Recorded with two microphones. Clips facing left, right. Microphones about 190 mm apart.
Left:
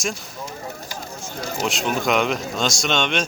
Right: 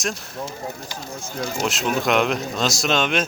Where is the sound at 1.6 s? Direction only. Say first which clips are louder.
Even; centre (ahead or behind).